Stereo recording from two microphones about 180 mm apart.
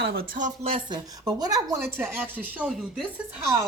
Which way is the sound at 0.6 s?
30° right (ahead or behind).